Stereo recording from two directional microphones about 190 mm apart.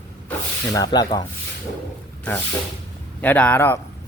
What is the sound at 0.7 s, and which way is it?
Speech, 20° left (ahead or behind).